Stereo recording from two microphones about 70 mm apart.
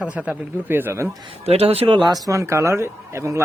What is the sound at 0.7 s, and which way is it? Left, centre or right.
Speech, right.